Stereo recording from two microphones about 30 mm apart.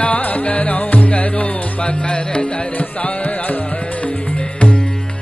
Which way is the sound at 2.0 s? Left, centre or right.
Left.